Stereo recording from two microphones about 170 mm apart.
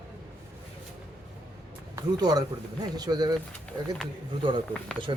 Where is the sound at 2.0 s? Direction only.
20° right (ahead or behind).